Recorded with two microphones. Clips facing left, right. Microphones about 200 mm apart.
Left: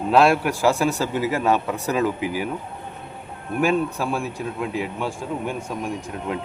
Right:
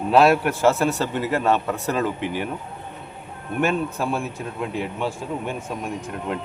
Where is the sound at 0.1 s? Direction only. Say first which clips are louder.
Right 1 dB; 5° right (ahead or behind).